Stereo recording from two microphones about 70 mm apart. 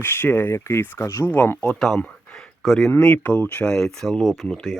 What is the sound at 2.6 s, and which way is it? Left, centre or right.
Speech, centre.